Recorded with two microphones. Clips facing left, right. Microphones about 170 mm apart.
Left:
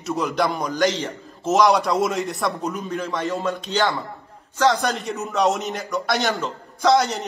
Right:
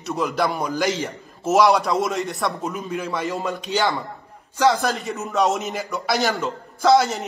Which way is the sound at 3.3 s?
15° right (ahead or behind).